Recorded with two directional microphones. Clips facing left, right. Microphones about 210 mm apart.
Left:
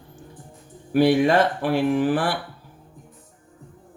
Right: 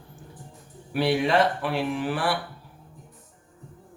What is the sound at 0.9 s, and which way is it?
Speech, 45° left (ahead or behind).